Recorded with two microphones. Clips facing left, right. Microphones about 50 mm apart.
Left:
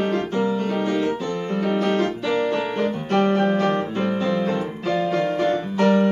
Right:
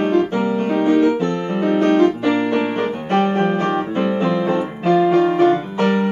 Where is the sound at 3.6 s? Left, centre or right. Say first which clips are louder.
Right 3 dB; centre.